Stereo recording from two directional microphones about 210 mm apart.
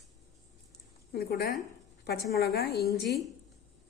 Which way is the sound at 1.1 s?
50° left (ahead or behind).